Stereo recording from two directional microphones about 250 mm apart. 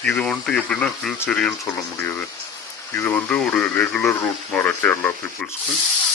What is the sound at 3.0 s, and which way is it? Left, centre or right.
Speech, centre.